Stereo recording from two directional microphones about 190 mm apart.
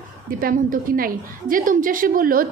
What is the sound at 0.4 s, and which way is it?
A woman's voice, 50° right (ahead or behind).